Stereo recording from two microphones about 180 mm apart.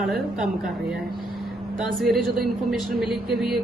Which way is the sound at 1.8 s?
Centre (ahead or behind).